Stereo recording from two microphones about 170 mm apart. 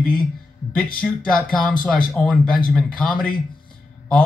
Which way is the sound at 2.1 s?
5° left (ahead or behind).